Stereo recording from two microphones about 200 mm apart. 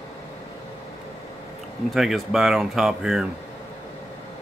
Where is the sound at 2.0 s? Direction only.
Centre (ahead or behind).